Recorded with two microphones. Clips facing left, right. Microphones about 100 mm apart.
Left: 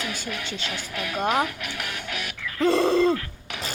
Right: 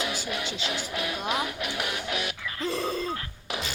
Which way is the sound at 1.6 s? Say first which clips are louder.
Right 2 dB; 5° right (ahead or behind).